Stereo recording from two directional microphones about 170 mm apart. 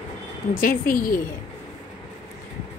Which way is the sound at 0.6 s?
55° left (ahead or behind).